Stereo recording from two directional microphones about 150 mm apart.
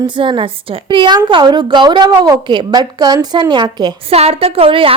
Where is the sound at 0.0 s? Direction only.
35° right (ahead or behind).